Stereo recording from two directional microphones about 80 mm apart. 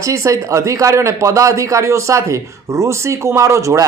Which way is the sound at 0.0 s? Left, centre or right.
Right.